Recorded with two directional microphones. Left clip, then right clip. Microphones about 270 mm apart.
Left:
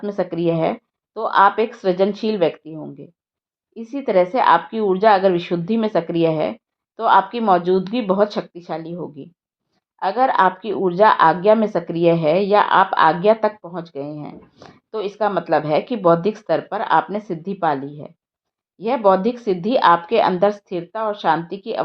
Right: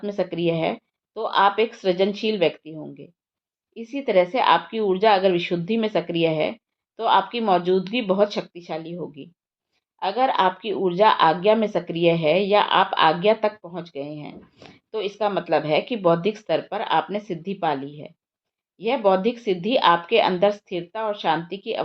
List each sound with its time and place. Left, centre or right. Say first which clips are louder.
0.0 s speech: left 3 dB; left